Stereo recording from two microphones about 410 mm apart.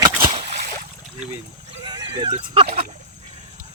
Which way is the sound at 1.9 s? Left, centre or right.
Centre.